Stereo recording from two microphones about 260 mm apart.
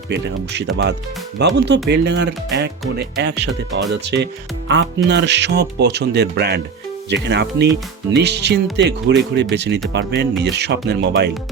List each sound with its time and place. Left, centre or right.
0.1 s speech: right